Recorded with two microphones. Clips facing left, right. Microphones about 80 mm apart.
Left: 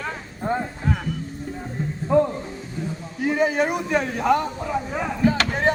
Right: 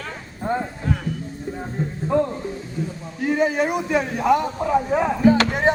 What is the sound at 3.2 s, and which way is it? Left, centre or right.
A man's voice, centre.